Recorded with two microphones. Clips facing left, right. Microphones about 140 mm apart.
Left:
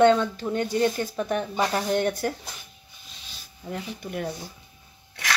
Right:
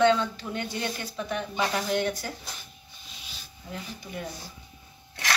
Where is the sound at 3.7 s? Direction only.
60° left (ahead or behind).